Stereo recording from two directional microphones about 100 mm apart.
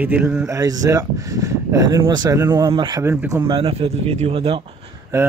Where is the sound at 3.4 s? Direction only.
65° right (ahead or behind).